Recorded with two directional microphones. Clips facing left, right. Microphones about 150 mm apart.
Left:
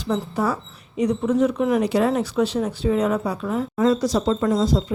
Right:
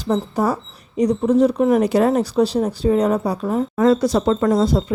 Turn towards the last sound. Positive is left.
turn(degrees=-60)  # may be behind; listen again after turning